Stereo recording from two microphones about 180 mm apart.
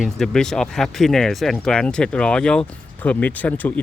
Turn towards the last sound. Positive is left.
turn(degrees=10)  # may be behind; listen again after turning